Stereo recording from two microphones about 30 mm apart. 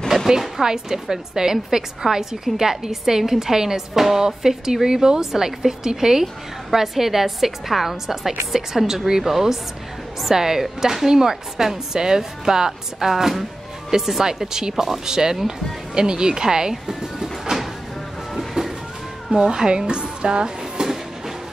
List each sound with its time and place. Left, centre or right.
0.6 s a woman's voice: centre
6.7 s a woman's voice: centre
13.1 s speech: centre
19.3 s speech: right